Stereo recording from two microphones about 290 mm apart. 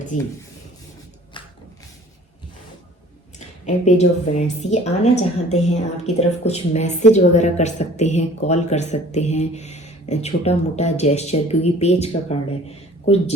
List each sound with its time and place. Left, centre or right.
3.3 s a woman's voice: left